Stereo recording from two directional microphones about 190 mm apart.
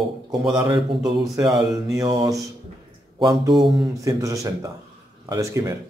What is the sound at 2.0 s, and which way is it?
A man's voice, 20° right (ahead or behind).